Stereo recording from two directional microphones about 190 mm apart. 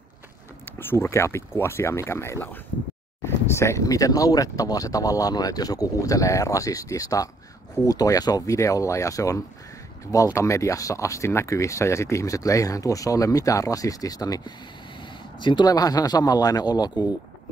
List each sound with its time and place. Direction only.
0.7 s speech: 10° left (ahead or behind)